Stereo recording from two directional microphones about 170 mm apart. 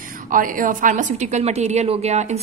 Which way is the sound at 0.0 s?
55° right (ahead or behind).